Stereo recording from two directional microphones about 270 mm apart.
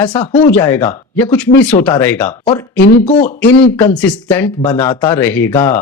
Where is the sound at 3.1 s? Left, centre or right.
Left.